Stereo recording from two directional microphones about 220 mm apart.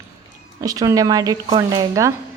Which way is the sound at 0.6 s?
15° right (ahead or behind).